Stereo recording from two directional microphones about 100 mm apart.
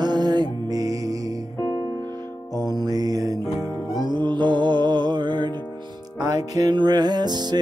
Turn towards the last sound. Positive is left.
turn(degrees=-45)  # may be behind; listen again after turning